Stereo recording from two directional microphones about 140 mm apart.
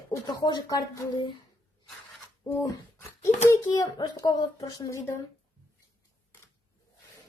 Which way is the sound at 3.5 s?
25° left (ahead or behind).